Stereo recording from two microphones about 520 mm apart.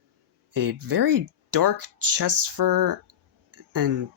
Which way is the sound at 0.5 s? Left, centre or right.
Right.